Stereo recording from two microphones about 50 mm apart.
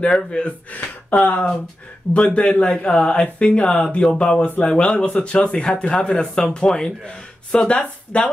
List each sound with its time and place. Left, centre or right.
0.3 s speech: left